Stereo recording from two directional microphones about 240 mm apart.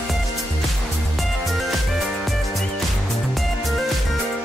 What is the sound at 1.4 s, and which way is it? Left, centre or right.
Music, centre.